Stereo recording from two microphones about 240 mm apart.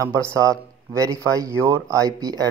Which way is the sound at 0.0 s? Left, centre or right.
Centre.